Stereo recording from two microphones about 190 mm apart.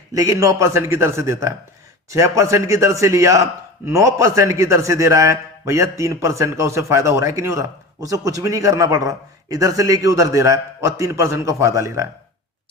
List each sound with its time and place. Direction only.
0.1 s a man's voice: 15° right (ahead or behind)